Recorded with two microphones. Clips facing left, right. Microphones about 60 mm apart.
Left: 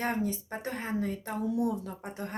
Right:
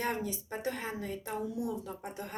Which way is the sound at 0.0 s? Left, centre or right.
Left.